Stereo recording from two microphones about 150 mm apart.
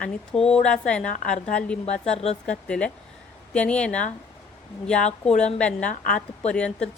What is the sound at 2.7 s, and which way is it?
A woman's voice, 5° left (ahead or behind).